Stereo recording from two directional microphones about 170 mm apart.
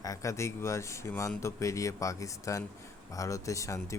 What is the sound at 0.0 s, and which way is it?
Speech, 20° left (ahead or behind).